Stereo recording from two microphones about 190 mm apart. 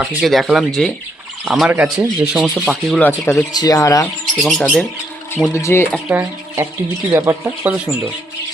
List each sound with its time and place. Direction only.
0.0 s speech: centre (ahead or behind)
3.1 s speech: 15° left (ahead or behind)
4.4 s speech: centre (ahead or behind)
5.5 s speech: 15° left (ahead or behind)
6.1 s speech: 10° right (ahead or behind)